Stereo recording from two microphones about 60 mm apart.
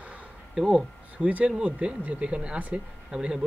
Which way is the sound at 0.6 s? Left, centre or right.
Centre.